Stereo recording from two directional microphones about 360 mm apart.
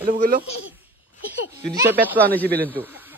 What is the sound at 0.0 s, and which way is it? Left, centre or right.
Speech, right.